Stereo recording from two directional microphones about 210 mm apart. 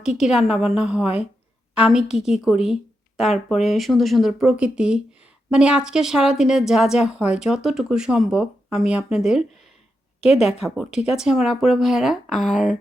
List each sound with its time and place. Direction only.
0.0 s a woman's voice: centre (ahead or behind)
10.2 s speech: 30° left (ahead or behind)
10.6 s a woman's voice: centre (ahead or behind)